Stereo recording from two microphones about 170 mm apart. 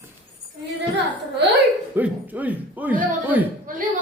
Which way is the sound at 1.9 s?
10° right (ahead or behind).